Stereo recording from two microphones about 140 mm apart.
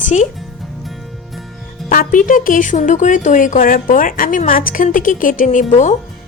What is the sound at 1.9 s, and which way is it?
A woman's voice, 80° left.